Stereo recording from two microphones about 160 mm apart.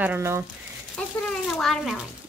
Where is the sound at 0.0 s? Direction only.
15° right (ahead or behind).